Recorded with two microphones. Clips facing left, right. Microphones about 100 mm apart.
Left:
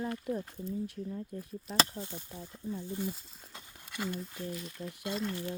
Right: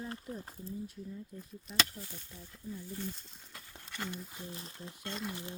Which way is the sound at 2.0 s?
25° left (ahead or behind).